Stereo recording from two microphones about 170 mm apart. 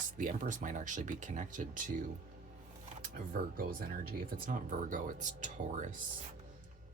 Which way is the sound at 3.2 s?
55° right (ahead or behind).